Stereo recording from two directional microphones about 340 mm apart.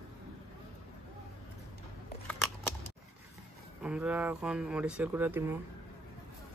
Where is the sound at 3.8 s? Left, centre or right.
Centre.